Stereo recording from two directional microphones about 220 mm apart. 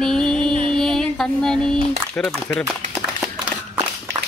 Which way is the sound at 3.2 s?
5° right (ahead or behind).